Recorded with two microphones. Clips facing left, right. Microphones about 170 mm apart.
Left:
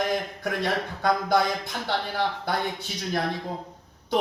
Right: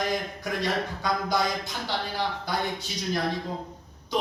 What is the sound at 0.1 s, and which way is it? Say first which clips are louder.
Speech: left 2 dB; 55° left (ahead or behind).